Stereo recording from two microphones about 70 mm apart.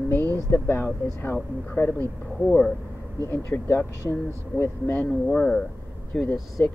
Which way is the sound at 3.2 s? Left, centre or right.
Left.